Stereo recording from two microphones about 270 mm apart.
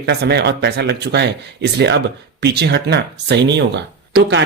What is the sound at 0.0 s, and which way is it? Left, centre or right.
Speech, right.